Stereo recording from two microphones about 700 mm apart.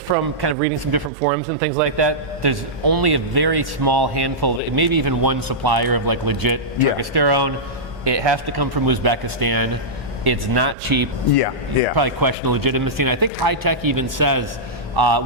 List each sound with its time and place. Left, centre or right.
0.1 s speech: centre
2.0 s a man's voice: right
11.3 s speech: left
11.9 s a man's voice: right